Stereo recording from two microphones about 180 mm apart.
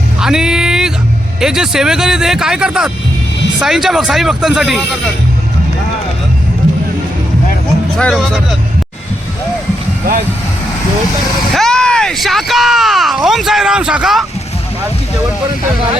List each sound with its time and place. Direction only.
0.2 s a sound: 5° right (ahead or behind)
1.4 s speech: 5° right (ahead or behind)
7.9 s speech: centre (ahead or behind)
11.5 s speech: 5° left (ahead or behind)